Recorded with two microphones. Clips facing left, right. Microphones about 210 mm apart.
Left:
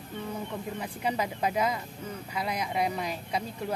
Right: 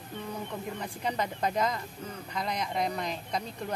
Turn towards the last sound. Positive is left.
turn(degrees=5)  # may be behind; listen again after turning